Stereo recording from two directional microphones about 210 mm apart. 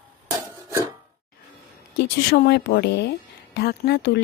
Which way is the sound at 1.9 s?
50° left (ahead or behind).